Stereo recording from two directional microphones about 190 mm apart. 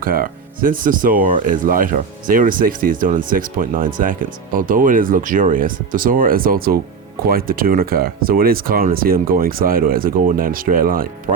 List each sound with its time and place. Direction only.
0.0 s speech: 50° right (ahead or behind)